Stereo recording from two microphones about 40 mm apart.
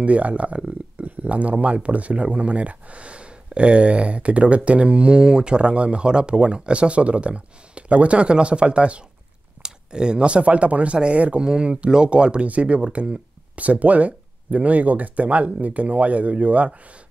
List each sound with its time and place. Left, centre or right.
0.0 s speech: right
13.7 s speech: right